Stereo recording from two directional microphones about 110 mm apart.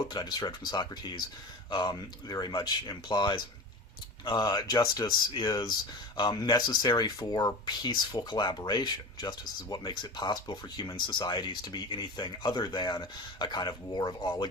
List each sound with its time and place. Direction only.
0.1 s speech: 40° left (ahead or behind)